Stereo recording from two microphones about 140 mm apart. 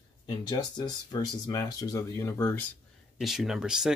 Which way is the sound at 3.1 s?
Centre (ahead or behind).